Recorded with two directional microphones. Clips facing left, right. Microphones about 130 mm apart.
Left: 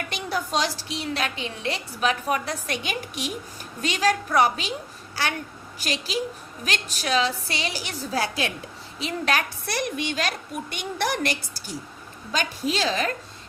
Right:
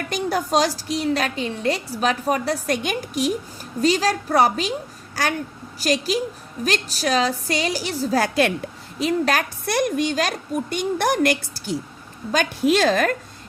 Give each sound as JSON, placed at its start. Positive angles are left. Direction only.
{"t": 0.1, "sound": "a woman's voice", "side_deg": -45}
{"t": 8.2, "sound": "a woman's voice", "side_deg": -55}
{"t": 9.0, "sound": "a woman's voice", "side_deg": -45}